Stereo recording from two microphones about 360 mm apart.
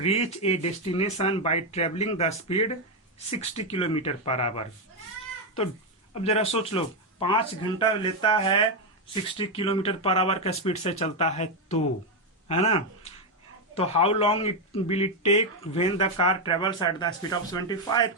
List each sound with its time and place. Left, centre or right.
0.0 s speech: centre
6.1 s speech: centre